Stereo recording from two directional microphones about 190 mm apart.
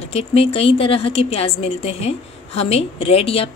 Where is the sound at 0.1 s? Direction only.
30° left (ahead or behind).